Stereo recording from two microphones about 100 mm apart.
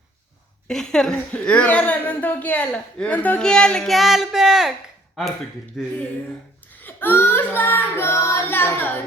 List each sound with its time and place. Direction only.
0.7 s speech: 5° left (ahead or behind)
5.7 s speech: 5° right (ahead or behind)
6.8 s child singing: 20° left (ahead or behind)